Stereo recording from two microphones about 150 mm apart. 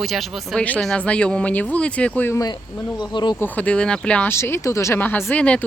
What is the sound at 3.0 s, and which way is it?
Speech, 30° left (ahead or behind).